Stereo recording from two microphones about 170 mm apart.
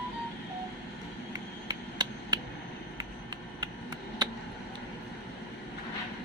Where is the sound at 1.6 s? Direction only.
25° right (ahead or behind).